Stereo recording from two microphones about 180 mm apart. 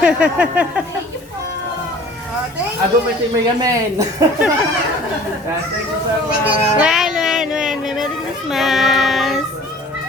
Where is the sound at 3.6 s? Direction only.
20° right (ahead or behind).